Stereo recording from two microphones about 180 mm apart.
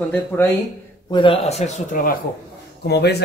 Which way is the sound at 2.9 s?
65° left (ahead or behind).